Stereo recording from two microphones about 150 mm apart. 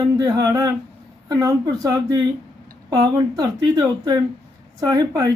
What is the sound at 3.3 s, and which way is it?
Speech, 25° right (ahead or behind).